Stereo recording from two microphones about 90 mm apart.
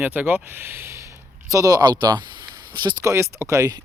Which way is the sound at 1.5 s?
45° right (ahead or behind).